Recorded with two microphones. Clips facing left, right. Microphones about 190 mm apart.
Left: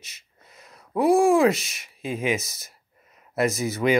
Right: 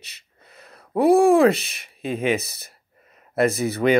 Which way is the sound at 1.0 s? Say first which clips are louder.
Right 3 dB; 60° right (ahead or behind).